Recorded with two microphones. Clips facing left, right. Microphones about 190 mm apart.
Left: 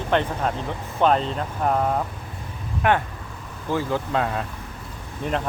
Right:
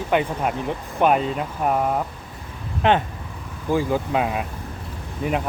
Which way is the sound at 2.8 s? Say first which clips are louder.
Right 2 dB; 20° right (ahead or behind).